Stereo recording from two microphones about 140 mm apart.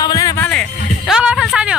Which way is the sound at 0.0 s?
25° left (ahead or behind).